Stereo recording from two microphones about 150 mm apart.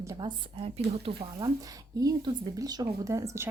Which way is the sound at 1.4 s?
25° right (ahead or behind).